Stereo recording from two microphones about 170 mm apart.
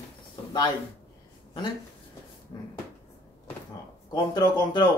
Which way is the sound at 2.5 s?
25° left (ahead or behind).